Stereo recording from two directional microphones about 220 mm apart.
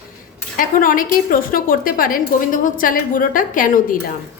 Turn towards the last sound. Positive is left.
turn(degrees=40)  # may be behind; listen again after turning